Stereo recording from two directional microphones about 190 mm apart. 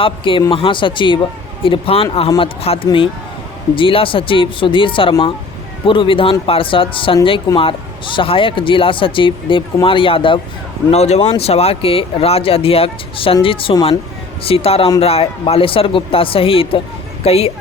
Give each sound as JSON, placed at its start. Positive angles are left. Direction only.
{"t": 0.0, "sound": "speech", "side_deg": 25}